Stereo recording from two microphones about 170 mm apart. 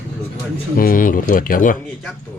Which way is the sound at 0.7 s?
55° left (ahead or behind).